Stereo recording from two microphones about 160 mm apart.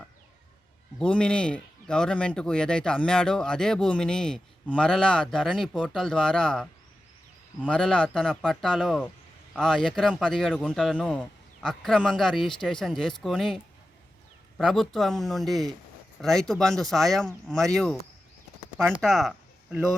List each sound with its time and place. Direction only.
0.9 s speech: 5° left (ahead or behind)
7.7 s speech: 5° left (ahead or behind)
14.6 s speech: centre (ahead or behind)
19.0 s speech: centre (ahead or behind)